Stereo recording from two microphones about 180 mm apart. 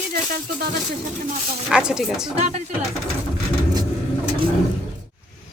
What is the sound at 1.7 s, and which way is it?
Speech, 5° right (ahead or behind).